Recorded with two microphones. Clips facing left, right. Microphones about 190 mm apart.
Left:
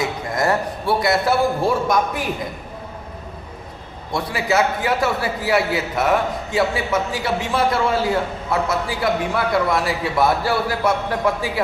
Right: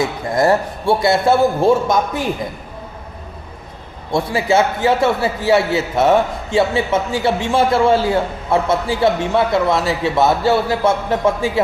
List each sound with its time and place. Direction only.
0.3 s a man's voice: 30° right (ahead or behind)
4.1 s a man's voice: 25° right (ahead or behind)